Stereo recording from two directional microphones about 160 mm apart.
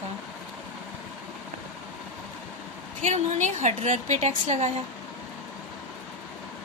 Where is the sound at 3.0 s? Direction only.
45° right (ahead or behind).